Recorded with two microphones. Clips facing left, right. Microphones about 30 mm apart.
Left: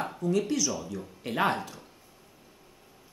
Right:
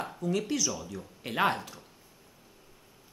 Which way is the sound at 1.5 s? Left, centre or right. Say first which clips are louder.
Left 2 dB; centre.